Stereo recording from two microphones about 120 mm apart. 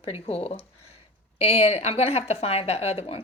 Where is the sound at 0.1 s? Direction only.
55° left (ahead or behind).